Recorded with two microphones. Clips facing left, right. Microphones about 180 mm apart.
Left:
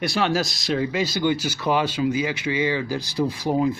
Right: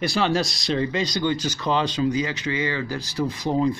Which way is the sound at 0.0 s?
Centre (ahead or behind).